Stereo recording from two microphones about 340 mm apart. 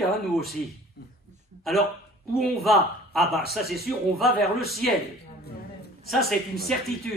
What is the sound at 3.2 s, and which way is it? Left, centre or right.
Speech, right.